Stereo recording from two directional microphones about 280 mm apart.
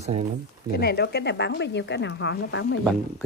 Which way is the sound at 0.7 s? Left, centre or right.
Left.